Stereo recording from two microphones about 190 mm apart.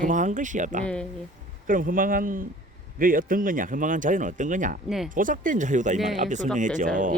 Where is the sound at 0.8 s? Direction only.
5° left (ahead or behind).